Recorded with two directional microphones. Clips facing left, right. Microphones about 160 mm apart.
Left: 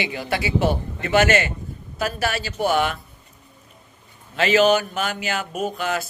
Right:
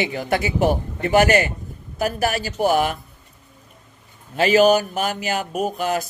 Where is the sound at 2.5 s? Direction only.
45° right (ahead or behind).